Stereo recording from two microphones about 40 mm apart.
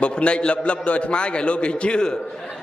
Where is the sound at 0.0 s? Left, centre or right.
Left.